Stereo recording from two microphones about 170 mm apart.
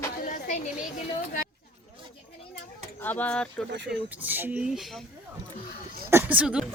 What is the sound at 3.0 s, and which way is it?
Speech, 10° left (ahead or behind).